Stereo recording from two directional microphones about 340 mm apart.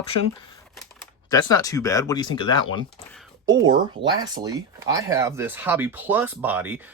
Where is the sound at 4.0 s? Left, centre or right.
Centre.